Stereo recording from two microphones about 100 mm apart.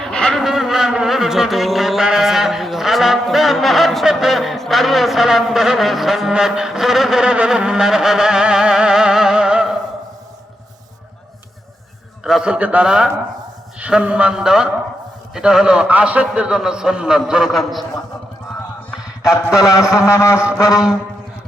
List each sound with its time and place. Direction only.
0.0 s vehicle: 10° left (ahead or behind)
0.4 s a sound: 5° right (ahead or behind)
12.2 s a man's voice: 5° right (ahead or behind)
19.5 s speech: 35° left (ahead or behind)